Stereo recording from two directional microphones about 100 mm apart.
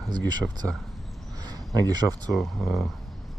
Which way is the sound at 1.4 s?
40° right (ahead or behind).